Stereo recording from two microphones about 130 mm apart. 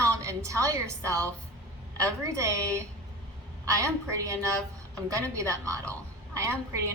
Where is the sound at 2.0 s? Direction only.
20° right (ahead or behind).